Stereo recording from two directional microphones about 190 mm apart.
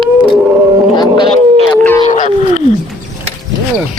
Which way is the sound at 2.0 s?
35° left (ahead or behind).